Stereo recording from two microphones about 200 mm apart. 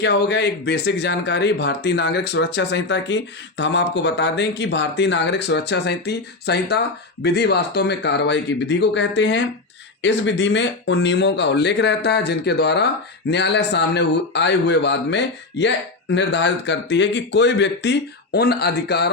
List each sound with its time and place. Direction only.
0.0 s speech: 60° left (ahead or behind)